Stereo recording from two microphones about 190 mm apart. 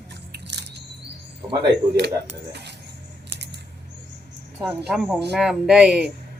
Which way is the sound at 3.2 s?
60° right (ahead or behind).